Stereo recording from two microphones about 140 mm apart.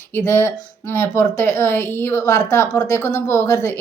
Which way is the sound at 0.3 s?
20° left (ahead or behind).